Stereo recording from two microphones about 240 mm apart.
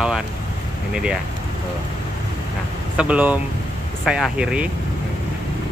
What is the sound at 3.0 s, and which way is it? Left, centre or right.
Speech, centre.